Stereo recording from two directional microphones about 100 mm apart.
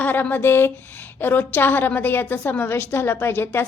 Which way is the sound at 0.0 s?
20° left (ahead or behind).